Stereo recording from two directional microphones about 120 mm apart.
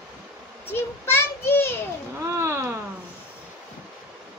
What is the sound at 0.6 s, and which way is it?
A child's voice, 20° left (ahead or behind).